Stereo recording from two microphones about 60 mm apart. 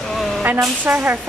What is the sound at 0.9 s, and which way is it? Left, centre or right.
Speech, right.